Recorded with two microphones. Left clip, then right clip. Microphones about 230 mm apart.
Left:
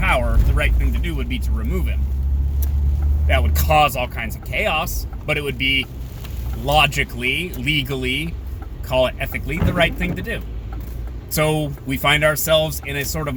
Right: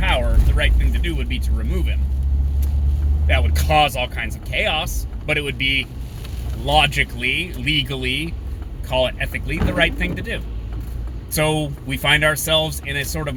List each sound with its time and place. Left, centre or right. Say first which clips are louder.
0.1 s speech: left 2 dB; centre
3.2 s speech: left 1 dB; centre
11.5 s speech: even; centre